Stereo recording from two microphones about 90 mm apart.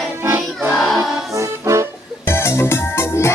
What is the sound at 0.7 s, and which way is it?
Choir, 5° left (ahead or behind).